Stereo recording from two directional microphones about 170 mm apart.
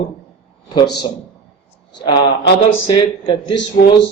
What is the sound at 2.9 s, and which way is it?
Speech, 30° left (ahead or behind).